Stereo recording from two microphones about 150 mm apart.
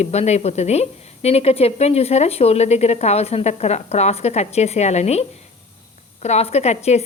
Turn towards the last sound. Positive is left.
turn(degrees=45)  # may be behind; listen again after turning